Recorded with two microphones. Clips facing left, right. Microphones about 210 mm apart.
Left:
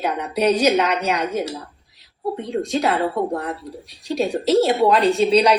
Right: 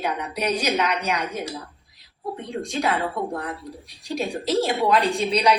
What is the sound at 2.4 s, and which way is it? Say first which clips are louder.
A woman's voice: left 4 dB; 30° left (ahead or behind).